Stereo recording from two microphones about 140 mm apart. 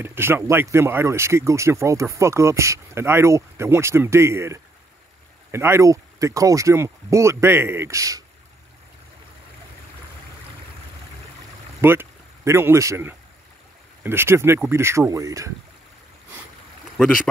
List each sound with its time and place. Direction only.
0.0 s speech: 15° right (ahead or behind)
11.8 s speech: 15° right (ahead or behind)
16.9 s speech: 5° left (ahead or behind)